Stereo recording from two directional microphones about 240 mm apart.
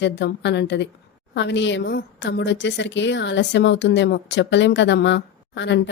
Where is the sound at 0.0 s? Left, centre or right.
Left.